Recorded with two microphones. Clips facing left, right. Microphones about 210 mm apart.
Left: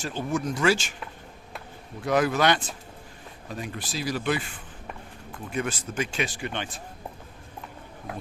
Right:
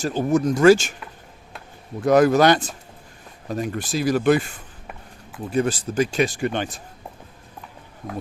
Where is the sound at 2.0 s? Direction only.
45° right (ahead or behind).